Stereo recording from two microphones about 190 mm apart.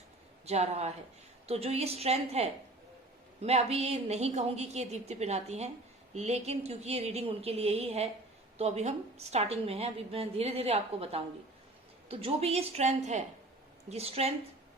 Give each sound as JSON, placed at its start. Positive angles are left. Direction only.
{"t": 0.4, "sound": "a woman's voice", "side_deg": -35}